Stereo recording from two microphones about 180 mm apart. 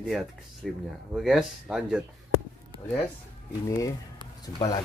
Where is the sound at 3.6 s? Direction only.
20° left (ahead or behind).